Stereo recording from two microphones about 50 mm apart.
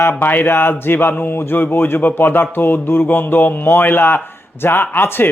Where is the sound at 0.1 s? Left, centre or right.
Left.